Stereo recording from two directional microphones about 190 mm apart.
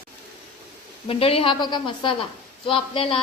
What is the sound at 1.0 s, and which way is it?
A woman's voice, 30° left (ahead or behind).